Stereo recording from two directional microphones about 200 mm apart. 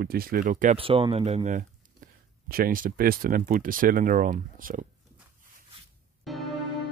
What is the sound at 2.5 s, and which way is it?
Speech, 45° right (ahead or behind).